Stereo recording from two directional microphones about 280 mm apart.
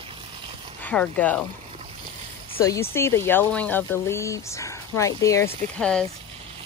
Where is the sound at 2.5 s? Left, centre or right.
Centre.